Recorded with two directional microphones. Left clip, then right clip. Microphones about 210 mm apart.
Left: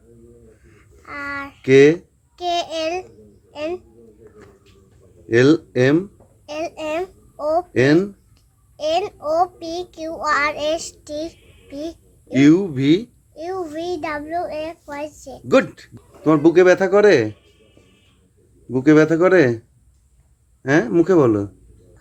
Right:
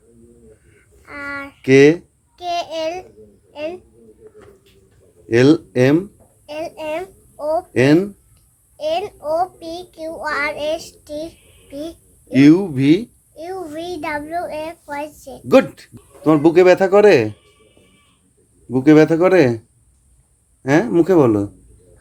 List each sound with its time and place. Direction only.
0.7 s a sound: 15° left (ahead or behind)
1.6 s speech: 5° right (ahead or behind)
2.3 s babbling: 15° left (ahead or behind)
5.3 s speech: 5° right (ahead or behind)
6.4 s a sound: 15° left (ahead or behind)
7.7 s speech: 5° right (ahead or behind)
8.8 s a child's voice: 15° left (ahead or behind)
12.3 s speech: 5° right (ahead or behind)
13.3 s a child's voice: 10° left (ahead or behind)
15.4 s speech: 5° right (ahead or behind)
18.7 s speech: 10° right (ahead or behind)
20.6 s speech: 10° right (ahead or behind)